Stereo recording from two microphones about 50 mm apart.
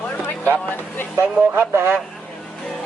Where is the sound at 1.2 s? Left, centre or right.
Right.